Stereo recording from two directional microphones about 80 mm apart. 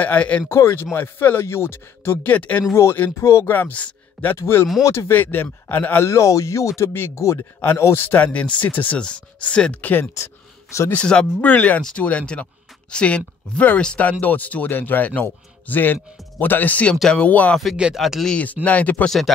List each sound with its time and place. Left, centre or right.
0.0 s speech: centre
0.5 s speech: left
2.7 s speech: left; by 4.4 s centre
4.4 s speech: left
6.0 s speech: left; by 10.0 s centre
10.1 s a sound: left
10.9 s speech: centre
17.9 s speech: centre
18.3 s speech: centre
19.0 s speech: centre